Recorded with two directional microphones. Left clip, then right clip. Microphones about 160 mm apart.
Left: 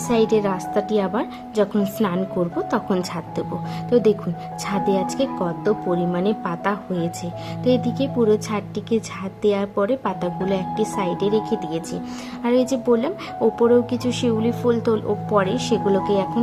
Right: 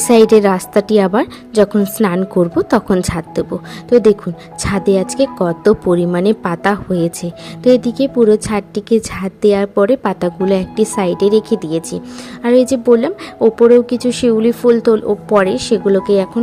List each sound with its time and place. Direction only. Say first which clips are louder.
0.1 s a woman's voice: right 10 dB; 50° right (ahead or behind); by 16.3 s 30° right (ahead or behind)